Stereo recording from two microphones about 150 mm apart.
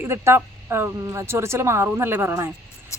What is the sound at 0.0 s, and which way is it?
A woman's voice, 15° right (ahead or behind).